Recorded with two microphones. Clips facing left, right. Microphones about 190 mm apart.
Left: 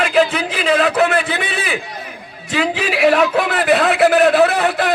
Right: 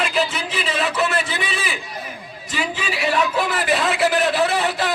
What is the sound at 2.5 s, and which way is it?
A man's voice, 70° left (ahead or behind).